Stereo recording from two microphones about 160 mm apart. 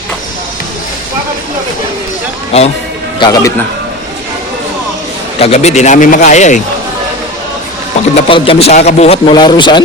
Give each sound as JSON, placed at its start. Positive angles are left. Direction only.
{"t": 3.2, "sound": "speech", "side_deg": 25}
{"t": 5.4, "sound": "a man's voice", "side_deg": 40}
{"t": 8.1, "sound": "a man's voice", "side_deg": 35}
{"t": 9.3, "sound": "speech", "side_deg": 30}